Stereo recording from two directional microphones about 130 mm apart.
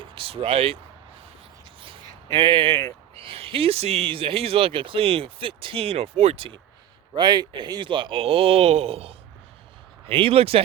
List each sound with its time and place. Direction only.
0.0 s speech: 45° right (ahead or behind)
1.8 s a sound: 40° right (ahead or behind)
3.2 s speech: 45° right (ahead or behind)
7.2 s speech: 35° right (ahead or behind)